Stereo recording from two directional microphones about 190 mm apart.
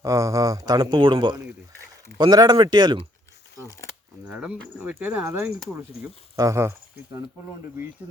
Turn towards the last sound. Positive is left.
turn(degrees=-15)  # may be behind; listen again after turning